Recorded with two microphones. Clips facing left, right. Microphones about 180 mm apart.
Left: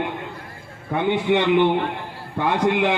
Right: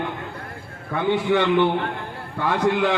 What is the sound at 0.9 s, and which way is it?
Speech, 20° left (ahead or behind).